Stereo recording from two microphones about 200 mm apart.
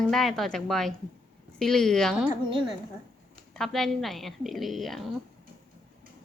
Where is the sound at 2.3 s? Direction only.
25° right (ahead or behind).